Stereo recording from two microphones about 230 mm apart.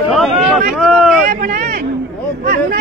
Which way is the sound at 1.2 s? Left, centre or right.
Right.